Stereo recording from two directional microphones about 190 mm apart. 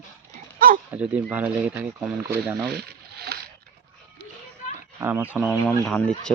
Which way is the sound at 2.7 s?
55° right (ahead or behind).